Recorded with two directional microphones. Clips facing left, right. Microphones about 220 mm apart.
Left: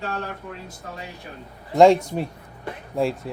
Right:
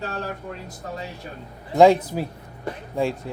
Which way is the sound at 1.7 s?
5° right (ahead or behind).